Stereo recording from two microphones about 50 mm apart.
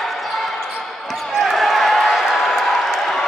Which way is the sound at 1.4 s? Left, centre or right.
Centre.